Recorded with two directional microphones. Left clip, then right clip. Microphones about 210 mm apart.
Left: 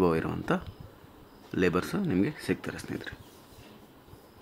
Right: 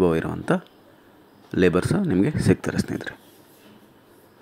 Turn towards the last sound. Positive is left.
turn(degrees=-20)  # may be behind; listen again after turning